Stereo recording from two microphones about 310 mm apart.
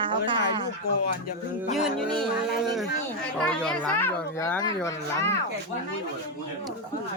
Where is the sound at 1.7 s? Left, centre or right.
Centre.